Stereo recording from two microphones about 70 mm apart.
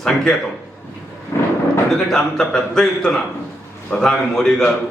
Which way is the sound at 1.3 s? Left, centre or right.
Left.